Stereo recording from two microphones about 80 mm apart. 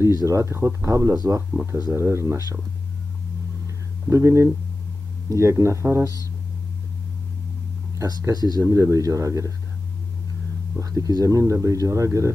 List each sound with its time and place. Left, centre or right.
0.0 s speech: right
4.1 s speech: right
8.2 s speech: right
10.8 s speech: right